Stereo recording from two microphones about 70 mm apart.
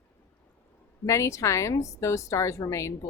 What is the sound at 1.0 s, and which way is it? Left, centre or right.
Speech, left.